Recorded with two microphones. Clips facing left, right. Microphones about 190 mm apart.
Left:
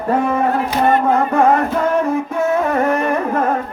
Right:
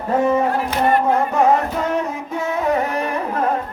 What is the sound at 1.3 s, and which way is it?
Music, 55° left (ahead or behind).